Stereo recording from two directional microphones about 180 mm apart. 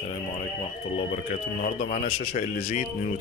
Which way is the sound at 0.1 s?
35° left (ahead or behind).